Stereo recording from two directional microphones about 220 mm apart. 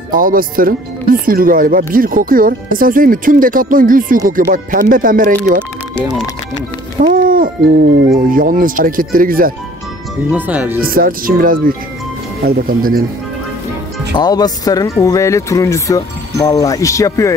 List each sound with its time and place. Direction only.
0.1 s speech: 40° right (ahead or behind)
7.0 s speech: 40° right (ahead or behind)
10.3 s speech: 10° right (ahead or behind)
10.8 s speech: 40° right (ahead or behind)
14.1 s speech: 15° left (ahead or behind)